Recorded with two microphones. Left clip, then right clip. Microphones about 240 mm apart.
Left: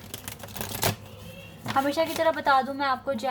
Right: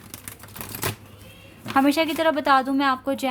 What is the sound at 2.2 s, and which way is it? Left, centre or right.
Speech, right.